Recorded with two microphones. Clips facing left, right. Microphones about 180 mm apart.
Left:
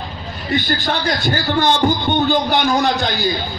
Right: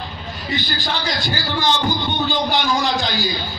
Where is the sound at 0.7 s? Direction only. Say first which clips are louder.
Left 5 dB; 60° left (ahead or behind).